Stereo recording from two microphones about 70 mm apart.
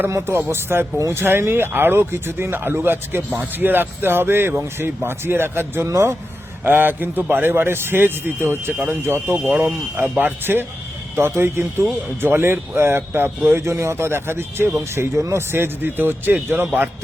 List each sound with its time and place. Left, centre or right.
0.1 s speech: right
0.9 s speech: right
1.2 s speech: right
6.7 s speech: right